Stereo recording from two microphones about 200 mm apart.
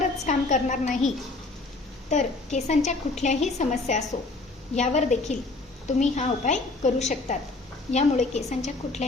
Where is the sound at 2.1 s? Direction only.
35° left (ahead or behind).